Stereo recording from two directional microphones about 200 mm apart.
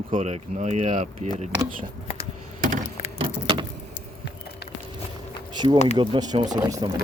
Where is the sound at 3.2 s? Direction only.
25° right (ahead or behind).